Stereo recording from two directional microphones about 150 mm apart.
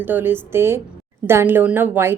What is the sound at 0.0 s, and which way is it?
A woman's voice, 15° right (ahead or behind).